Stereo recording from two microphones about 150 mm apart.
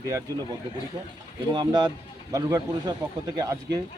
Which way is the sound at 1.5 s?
30° right (ahead or behind).